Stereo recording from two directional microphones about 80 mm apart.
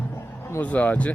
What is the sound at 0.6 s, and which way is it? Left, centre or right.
Speech, centre.